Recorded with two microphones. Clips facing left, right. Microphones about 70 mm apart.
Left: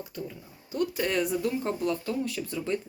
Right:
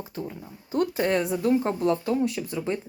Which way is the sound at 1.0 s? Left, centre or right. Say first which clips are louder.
Right 3 dB; right.